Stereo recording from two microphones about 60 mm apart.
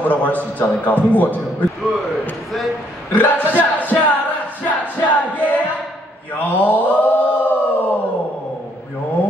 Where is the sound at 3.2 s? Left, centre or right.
Left.